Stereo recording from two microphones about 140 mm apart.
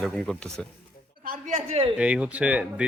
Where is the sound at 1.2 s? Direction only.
75° right (ahead or behind); by 1.8 s 60° right (ahead or behind).